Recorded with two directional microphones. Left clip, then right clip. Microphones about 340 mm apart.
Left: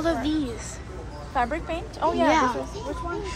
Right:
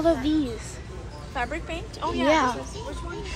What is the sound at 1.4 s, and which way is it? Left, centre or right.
Speech, left.